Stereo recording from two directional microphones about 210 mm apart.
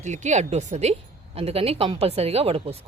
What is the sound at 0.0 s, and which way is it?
A woman's voice, 35° right (ahead or behind).